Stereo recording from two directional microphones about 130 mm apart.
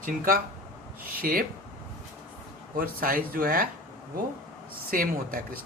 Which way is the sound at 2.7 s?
90° right.